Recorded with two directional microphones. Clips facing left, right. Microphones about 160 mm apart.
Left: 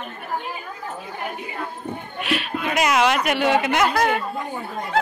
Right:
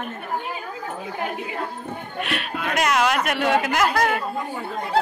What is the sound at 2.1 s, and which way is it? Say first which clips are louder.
Speech: left 3 dB; centre (ahead or behind).